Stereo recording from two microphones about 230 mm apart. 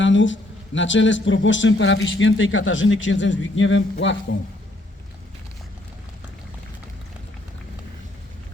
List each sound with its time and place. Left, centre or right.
0.0 s speech: left